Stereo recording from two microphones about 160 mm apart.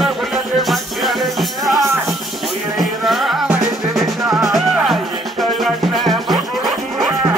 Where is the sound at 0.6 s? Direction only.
Centre (ahead or behind).